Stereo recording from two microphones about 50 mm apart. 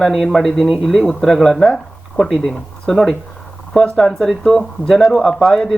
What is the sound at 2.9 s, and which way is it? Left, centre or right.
A man's voice, centre.